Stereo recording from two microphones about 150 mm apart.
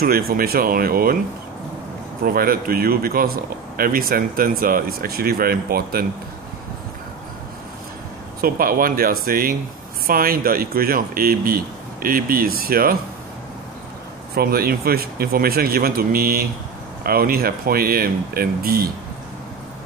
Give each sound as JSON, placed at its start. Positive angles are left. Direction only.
{"t": 0.0, "sound": "speech", "side_deg": -80}
{"t": 2.2, "sound": "speech", "side_deg": -80}
{"t": 8.4, "sound": "speech", "side_deg": -75}
{"t": 14.3, "sound": "speech", "side_deg": -90}